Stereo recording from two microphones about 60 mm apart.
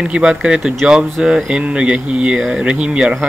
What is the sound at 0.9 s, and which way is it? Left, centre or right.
Speech, centre.